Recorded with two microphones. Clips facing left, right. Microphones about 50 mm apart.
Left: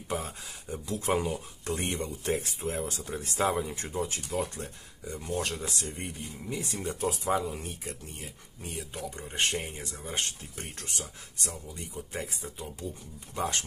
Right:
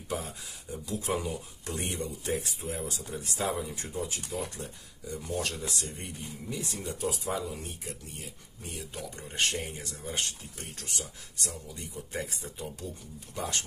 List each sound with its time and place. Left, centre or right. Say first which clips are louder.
0.1 s speech: left 1 dB; left
5.1 s speech: left 1 dB; left
11.9 s speech: right 1 dB; left
13.4 s speech: left 3 dB; left